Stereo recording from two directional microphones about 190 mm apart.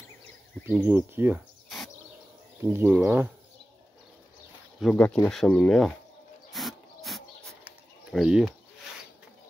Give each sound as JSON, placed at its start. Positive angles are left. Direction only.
{"t": 0.7, "sound": "speech", "side_deg": -10}
{"t": 2.6, "sound": "speech", "side_deg": -10}
{"t": 4.8, "sound": "speech", "side_deg": 5}
{"t": 6.5, "sound": "a sound", "side_deg": 0}